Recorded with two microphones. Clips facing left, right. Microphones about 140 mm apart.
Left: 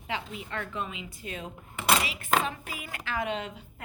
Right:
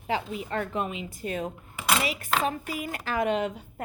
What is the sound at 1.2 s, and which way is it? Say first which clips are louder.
A woman's voice: right 9 dB; 45° right (ahead or behind).